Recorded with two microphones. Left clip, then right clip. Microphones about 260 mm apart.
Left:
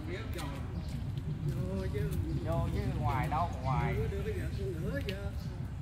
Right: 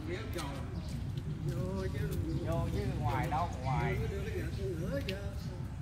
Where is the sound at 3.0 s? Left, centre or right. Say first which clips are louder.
Left 2 dB; left.